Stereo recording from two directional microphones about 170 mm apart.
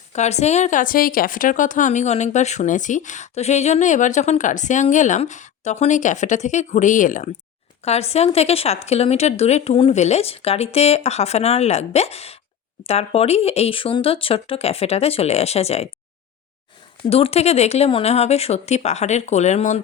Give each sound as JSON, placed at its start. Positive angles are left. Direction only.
{"t": 0.1, "sound": "speech", "side_deg": 40}
{"t": 7.9, "sound": "a woman's voice", "side_deg": 40}
{"t": 17.1, "sound": "a woman's voice", "side_deg": 35}